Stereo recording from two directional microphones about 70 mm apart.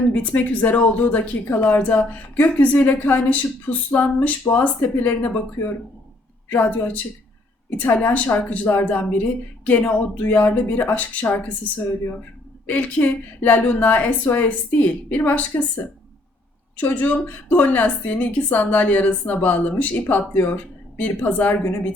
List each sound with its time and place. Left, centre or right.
0.1 s speech: left
6.5 s speech: left